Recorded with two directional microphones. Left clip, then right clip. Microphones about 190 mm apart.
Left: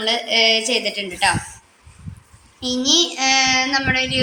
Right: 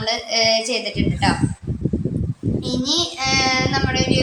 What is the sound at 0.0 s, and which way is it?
A woman's voice, 15° left (ahead or behind).